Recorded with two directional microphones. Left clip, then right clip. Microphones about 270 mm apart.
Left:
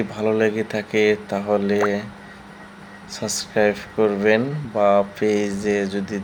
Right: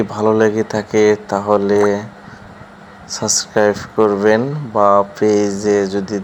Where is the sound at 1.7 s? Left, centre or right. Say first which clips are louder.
Right 7 dB; centre.